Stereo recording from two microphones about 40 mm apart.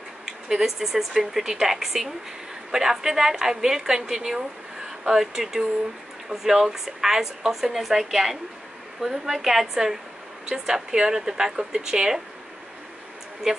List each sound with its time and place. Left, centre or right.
0.2 s speech: centre